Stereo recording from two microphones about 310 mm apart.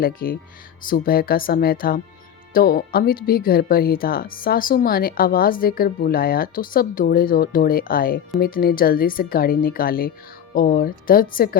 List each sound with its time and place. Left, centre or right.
0.0 s speech: left